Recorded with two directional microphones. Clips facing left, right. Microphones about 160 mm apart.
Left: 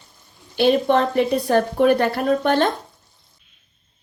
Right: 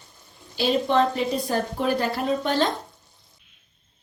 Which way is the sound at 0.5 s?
60° left (ahead or behind).